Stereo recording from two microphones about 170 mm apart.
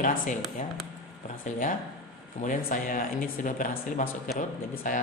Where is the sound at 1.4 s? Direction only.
50° left (ahead or behind).